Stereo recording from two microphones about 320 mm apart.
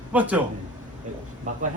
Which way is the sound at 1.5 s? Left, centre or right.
Right.